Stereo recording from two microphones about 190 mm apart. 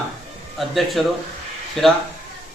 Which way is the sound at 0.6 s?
Centre (ahead or behind).